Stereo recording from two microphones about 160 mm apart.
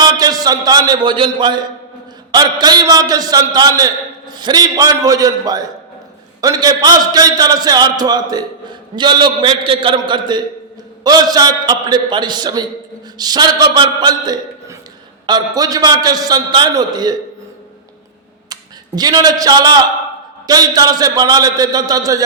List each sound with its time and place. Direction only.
0.0 s a man's voice: 25° right (ahead or behind)
18.9 s a man's voice: 25° right (ahead or behind)